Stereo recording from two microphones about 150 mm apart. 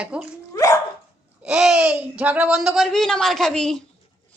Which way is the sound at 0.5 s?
20° left (ahead or behind).